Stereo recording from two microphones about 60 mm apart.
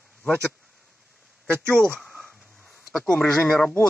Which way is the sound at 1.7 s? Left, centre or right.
Centre.